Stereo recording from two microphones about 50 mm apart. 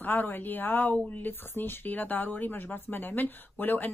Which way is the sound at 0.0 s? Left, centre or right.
Left.